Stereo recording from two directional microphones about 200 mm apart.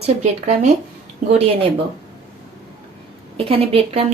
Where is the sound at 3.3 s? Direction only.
30° right (ahead or behind).